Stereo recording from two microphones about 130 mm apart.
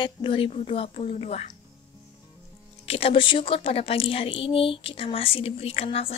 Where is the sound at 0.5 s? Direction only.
50° left (ahead or behind).